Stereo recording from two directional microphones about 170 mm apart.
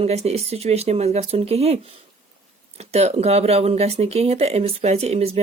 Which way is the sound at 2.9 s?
40° right (ahead or behind).